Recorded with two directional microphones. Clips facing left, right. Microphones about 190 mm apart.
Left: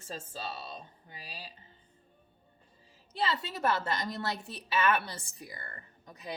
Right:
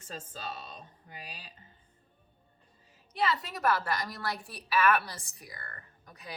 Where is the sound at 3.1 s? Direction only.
30° left (ahead or behind).